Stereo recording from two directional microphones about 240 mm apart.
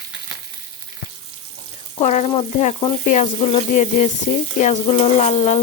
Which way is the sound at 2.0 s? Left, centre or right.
Left.